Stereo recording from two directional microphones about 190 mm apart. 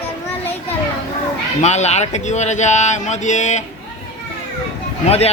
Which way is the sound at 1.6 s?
35° left (ahead or behind).